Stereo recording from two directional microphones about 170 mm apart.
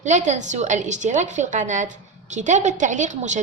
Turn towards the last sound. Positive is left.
turn(degrees=-45)  # may be behind; listen again after turning